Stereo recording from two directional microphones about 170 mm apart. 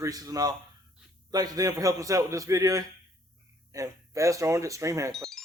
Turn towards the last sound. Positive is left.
turn(degrees=0)  # may be behind; listen again after turning